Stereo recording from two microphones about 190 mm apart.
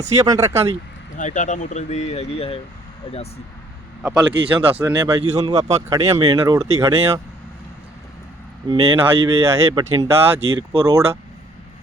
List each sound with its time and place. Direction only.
0.2 s speech: 15° right (ahead or behind)
1.1 s speech: 40° left (ahead or behind)
4.0 s speech: 5° right (ahead or behind)
8.7 s speech: 30° right (ahead or behind)
9.2 s speech: 15° right (ahead or behind)
10.5 s speech: 25° right (ahead or behind)